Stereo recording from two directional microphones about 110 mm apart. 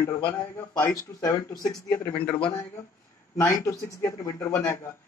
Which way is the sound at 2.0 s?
15° left (ahead or behind).